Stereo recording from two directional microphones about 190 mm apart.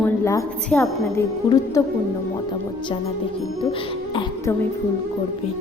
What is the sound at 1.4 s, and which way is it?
Speech, 20° left (ahead or behind).